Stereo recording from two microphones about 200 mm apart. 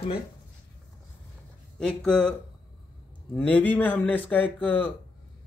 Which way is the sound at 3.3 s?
10° left (ahead or behind).